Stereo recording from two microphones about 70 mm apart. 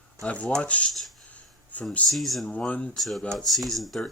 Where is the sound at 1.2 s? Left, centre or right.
Centre.